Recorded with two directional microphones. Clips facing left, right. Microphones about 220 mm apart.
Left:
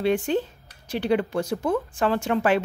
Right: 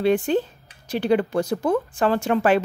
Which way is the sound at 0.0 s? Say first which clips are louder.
Right 3 dB; 40° right (ahead or behind).